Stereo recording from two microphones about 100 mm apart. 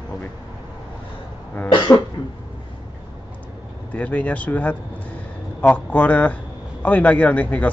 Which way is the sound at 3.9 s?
15° left (ahead or behind).